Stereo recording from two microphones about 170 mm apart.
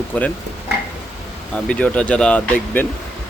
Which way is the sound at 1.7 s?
5° left (ahead or behind).